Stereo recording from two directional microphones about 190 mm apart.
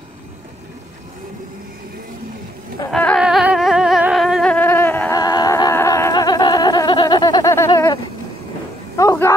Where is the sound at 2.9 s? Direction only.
5° left (ahead or behind).